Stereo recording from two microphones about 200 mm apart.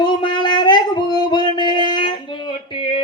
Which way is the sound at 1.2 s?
25° left (ahead or behind).